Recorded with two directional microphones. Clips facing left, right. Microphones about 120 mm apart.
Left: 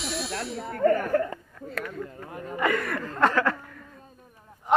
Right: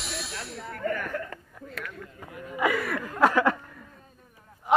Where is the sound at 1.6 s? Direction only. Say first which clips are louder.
Left 6 dB; 5° right (ahead or behind).